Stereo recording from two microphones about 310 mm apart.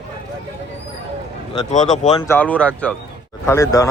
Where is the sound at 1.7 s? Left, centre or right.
Left.